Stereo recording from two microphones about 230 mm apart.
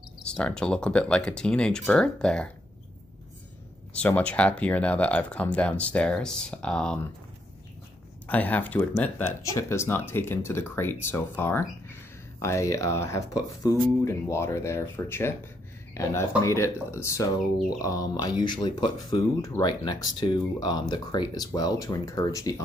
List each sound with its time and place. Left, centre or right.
0.2 s speech: centre
3.9 s speech: centre
8.3 s speech: centre